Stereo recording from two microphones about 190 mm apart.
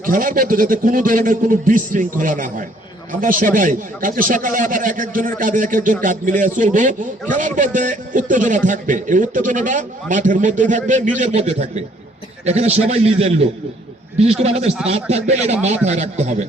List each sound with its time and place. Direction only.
0.0 s a man's voice: 45° right (ahead or behind)